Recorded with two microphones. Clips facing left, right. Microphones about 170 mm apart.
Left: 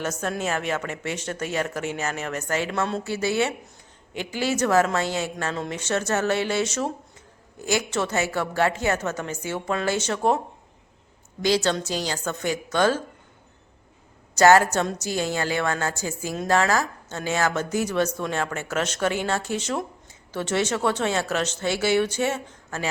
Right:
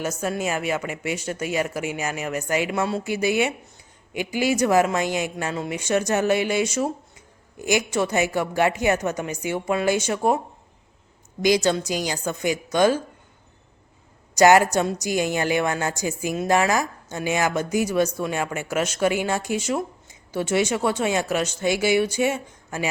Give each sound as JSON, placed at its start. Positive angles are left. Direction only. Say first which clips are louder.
{"t": 0.0, "sound": "a woman's voice", "louder": "right 2 dB", "side_deg": -10}
{"t": 11.4, "sound": "a woman's voice", "louder": "right 3 dB", "side_deg": -15}
{"t": 14.3, "sound": "a woman's voice", "louder": "right 1 dB", "side_deg": -15}